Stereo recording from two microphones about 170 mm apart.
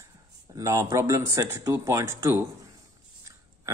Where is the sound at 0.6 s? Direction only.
15° right (ahead or behind).